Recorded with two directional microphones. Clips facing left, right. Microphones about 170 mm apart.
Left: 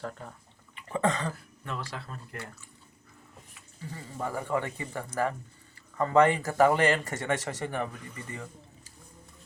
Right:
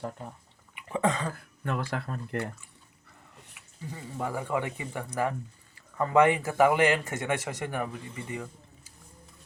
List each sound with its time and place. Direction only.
0.0 s speech: 15° right (ahead or behind)
0.8 s a sound: 10° right (ahead or behind)
1.6 s speech: 55° right (ahead or behind)
3.9 s speech: 10° right (ahead or behind)